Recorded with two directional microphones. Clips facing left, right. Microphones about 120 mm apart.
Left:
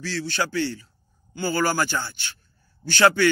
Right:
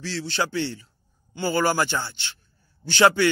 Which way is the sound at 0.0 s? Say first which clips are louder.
Even; 25° right (ahead or behind).